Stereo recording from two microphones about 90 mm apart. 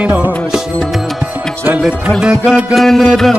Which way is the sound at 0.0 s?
15° right (ahead or behind).